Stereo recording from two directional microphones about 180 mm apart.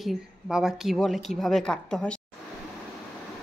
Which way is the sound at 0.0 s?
5° right (ahead or behind).